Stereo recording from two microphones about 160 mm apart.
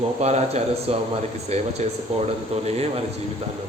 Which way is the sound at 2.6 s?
40° right (ahead or behind).